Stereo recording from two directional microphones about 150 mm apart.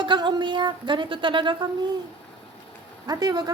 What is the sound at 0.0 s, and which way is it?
Speech, 30° right (ahead or behind).